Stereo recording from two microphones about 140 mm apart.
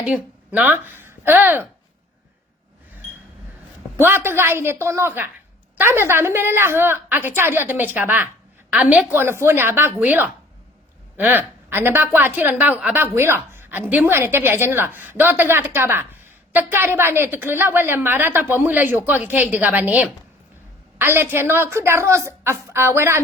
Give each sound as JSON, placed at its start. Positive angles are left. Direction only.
{"t": 0.0, "sound": "a woman's voice", "side_deg": -10}
{"t": 3.9, "sound": "a woman's voice", "side_deg": -15}